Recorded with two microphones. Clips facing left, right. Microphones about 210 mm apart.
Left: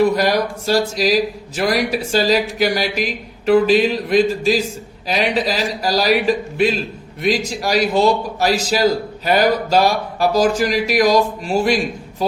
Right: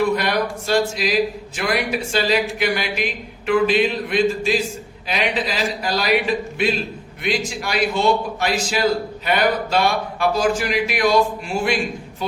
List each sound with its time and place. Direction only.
0.0 s speech: 40° left (ahead or behind)